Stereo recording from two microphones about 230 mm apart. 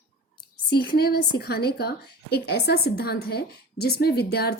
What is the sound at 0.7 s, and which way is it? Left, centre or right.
A woman's voice, left.